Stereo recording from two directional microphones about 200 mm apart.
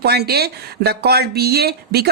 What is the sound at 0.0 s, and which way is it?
Speech, 55° right (ahead or behind).